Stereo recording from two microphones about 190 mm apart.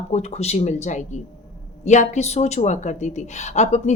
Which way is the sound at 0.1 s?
35° left (ahead or behind).